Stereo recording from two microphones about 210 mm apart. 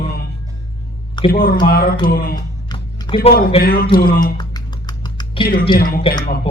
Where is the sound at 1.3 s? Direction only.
45° left (ahead or behind).